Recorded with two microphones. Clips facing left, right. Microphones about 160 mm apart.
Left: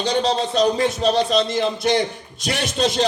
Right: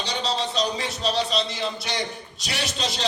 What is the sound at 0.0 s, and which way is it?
A man's voice, 50° left (ahead or behind).